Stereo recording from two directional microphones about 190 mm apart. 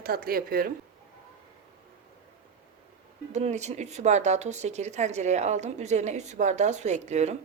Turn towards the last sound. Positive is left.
turn(degrees=-35)  # may be behind; listen again after turning